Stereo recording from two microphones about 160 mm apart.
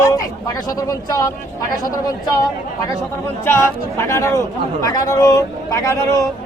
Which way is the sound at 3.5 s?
15° left (ahead or behind).